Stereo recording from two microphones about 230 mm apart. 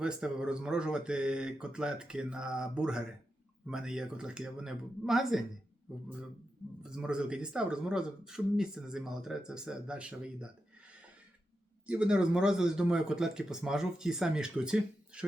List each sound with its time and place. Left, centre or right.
0.0 s speech: centre
6.8 s speech: centre
11.9 s speech: centre